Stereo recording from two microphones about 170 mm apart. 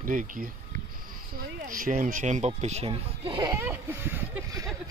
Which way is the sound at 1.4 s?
55° right (ahead or behind).